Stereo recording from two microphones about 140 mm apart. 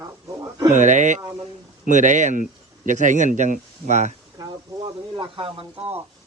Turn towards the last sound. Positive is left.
turn(degrees=-40)  # may be behind; listen again after turning